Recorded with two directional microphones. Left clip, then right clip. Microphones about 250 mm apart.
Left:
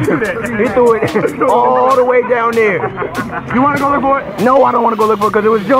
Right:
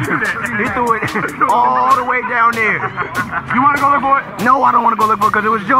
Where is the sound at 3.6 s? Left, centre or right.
Right.